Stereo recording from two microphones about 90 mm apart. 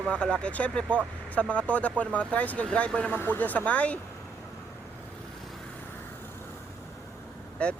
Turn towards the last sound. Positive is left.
turn(degrees=15)  # may be behind; listen again after turning